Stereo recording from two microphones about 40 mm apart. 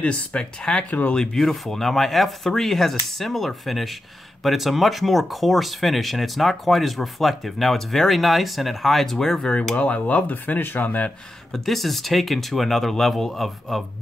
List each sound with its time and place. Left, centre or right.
0.0 s speech: left
0.8 s speech: left
1.1 s speech: centre
9.8 s speech: left
11.5 s speech: centre